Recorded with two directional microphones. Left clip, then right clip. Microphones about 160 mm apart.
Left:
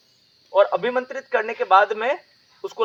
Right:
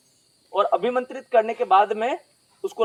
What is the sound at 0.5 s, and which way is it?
Speech, 35° right (ahead or behind).